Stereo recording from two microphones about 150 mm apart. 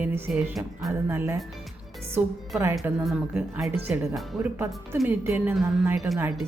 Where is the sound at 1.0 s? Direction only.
15° right (ahead or behind).